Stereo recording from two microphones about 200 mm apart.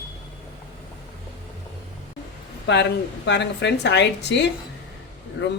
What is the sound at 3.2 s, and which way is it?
Speech, 60° left (ahead or behind).